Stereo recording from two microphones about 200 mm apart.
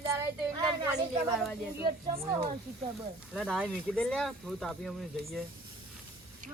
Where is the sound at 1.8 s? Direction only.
25° right (ahead or behind).